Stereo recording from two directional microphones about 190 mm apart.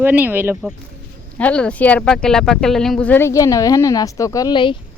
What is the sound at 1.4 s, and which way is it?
Speech, 5° left (ahead or behind).